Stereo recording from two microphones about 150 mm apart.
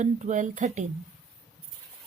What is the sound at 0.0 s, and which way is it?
Speech, 55° right (ahead or behind).